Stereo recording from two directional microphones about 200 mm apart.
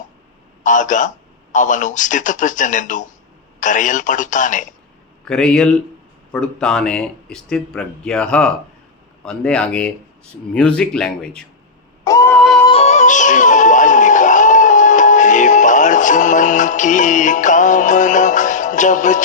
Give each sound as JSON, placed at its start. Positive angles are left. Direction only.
{"t": 0.6, "sound": "a man's voice", "side_deg": 40}
{"t": 5.3, "sound": "speech", "side_deg": 5}
{"t": 12.0, "sound": "a sound", "side_deg": 15}
{"t": 12.4, "sound": "music", "side_deg": 0}
{"t": 12.6, "sound": "music", "side_deg": 30}